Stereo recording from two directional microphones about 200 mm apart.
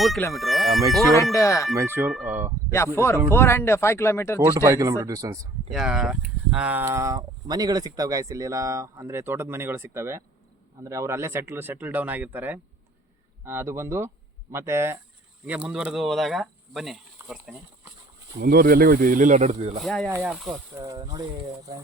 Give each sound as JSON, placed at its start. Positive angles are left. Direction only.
{"t": 0.3, "sound": "speech", "side_deg": 0}
{"t": 1.1, "sound": "speech", "side_deg": 15}
{"t": 1.7, "sound": "speech", "side_deg": -15}
{"t": 2.0, "sound": "speech", "side_deg": 0}
{"t": 2.7, "sound": "speech", "side_deg": 15}
{"t": 4.4, "sound": "speech", "side_deg": -15}
{"t": 5.7, "sound": "speech", "side_deg": -5}
{"t": 18.3, "sound": "speech", "side_deg": -50}
{"t": 19.8, "sound": "speech", "side_deg": 0}
{"t": 20.1, "sound": "speech", "side_deg": -10}
{"t": 20.3, "sound": "speech", "side_deg": 0}
{"t": 20.7, "sound": "speech", "side_deg": -15}